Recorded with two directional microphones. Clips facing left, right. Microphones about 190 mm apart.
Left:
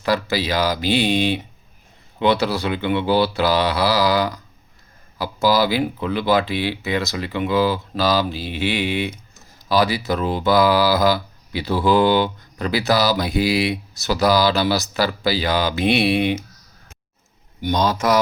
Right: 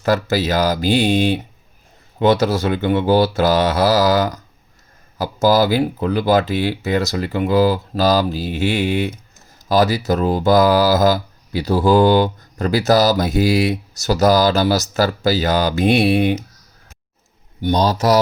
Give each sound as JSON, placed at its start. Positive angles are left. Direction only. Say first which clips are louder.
{"t": 0.0, "sound": "speech", "louder": "right 3 dB", "side_deg": -45}
{"t": 17.6, "sound": "a man's voice", "louder": "right 3 dB", "side_deg": -35}